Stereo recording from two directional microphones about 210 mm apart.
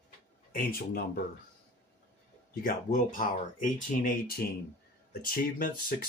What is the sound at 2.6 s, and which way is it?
Speech, 40° left (ahead or behind).